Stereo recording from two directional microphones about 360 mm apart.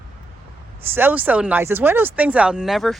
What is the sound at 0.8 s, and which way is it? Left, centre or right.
Speech, centre.